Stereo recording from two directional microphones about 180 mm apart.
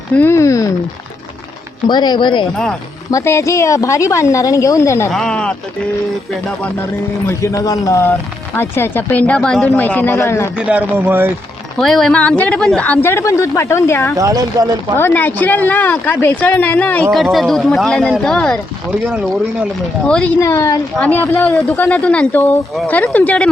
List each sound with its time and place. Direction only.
0.2 s speech: 15° left (ahead or behind)
1.9 s speech: 25° left (ahead or behind)
3.1 s speech: 15° left (ahead or behind)
5.1 s speech: 5° left (ahead or behind)
7.3 s speech: 15° left (ahead or behind)
10.6 s speech: 10° right (ahead or behind)
11.8 s speech: centre (ahead or behind)
14.2 s speech: 20° right (ahead or behind)
14.9 s speech: 10° left (ahead or behind); by 19.6 s 5° right (ahead or behind)
20.1 s speech: 5° left (ahead or behind)
20.4 s speech: 15° left (ahead or behind)